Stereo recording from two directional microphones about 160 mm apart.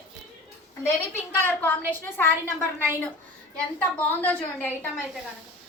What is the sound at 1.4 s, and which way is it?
Speech, 10° left (ahead or behind).